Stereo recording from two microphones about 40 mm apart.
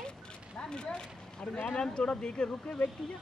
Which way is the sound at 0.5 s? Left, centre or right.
Left.